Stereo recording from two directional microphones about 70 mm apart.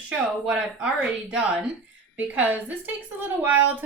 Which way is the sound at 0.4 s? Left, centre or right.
Centre.